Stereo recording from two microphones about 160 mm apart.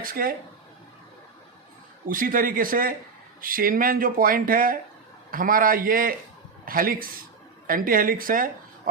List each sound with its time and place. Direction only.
0.0 s speech: 65° right (ahead or behind)
2.0 s speech: 60° right (ahead or behind)